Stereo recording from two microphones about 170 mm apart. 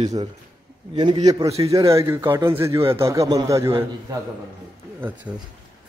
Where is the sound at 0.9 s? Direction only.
25° right (ahead or behind).